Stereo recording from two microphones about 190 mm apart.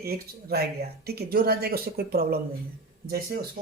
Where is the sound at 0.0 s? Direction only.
55° right (ahead or behind).